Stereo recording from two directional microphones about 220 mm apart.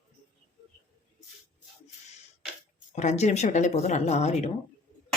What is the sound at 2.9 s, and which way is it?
Speech, 30° left (ahead or behind).